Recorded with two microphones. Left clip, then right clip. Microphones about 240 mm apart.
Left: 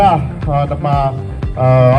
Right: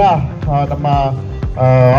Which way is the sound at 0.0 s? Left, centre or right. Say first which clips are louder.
Left 1 dB; left.